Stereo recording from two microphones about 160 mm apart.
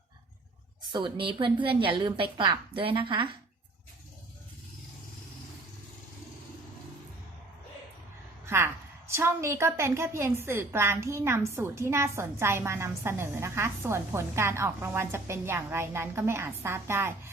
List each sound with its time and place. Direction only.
0.9 s a woman's voice: 30° right (ahead or behind)
8.4 s a woman's voice: 15° right (ahead or behind)